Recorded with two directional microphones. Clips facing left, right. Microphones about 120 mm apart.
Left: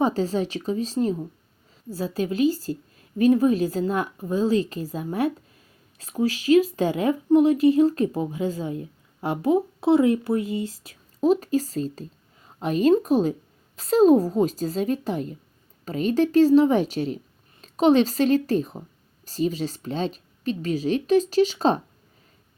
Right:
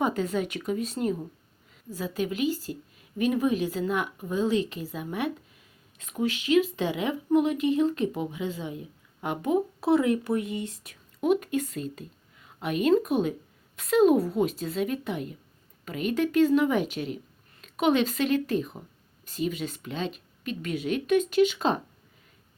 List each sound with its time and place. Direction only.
0.0 s speech: 30° left (ahead or behind)